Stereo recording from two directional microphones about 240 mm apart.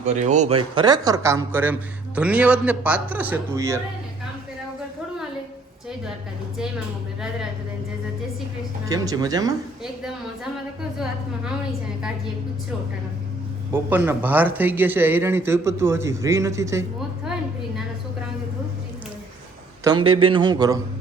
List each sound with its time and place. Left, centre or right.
0.0 s speech: right; by 3.8 s centre
8.9 s speech: centre
9.8 s a woman's voice: centre
13.7 s speech: centre
19.8 s a man's voice: centre